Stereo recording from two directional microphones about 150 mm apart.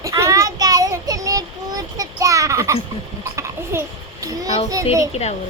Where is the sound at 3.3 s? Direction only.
20° right (ahead or behind).